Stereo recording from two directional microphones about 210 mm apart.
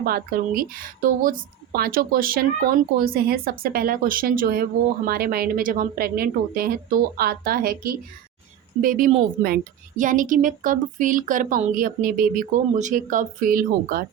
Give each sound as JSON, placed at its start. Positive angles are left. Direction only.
{"t": 0.0, "sound": "a woman's voice", "side_deg": -45}